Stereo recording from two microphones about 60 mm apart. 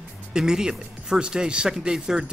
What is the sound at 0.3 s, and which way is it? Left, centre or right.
Speech, centre.